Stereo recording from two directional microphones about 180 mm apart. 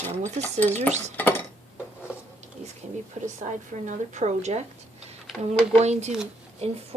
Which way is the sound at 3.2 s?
40° right (ahead or behind).